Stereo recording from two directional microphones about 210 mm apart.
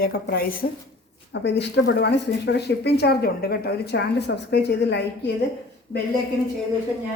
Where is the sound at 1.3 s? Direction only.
55° left (ahead or behind).